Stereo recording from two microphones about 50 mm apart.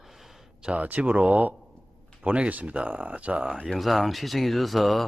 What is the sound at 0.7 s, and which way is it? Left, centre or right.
Speech, right.